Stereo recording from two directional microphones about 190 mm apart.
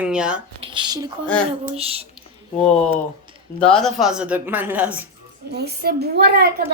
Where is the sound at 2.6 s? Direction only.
35° left (ahead or behind).